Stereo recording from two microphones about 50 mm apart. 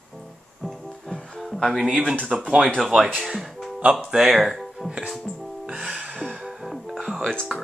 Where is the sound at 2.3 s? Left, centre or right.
Centre.